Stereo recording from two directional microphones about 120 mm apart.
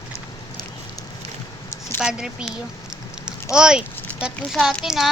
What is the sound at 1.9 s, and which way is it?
Speech, 5° right (ahead or behind).